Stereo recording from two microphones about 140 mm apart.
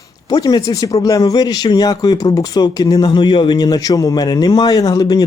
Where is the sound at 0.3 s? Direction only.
25° left (ahead or behind).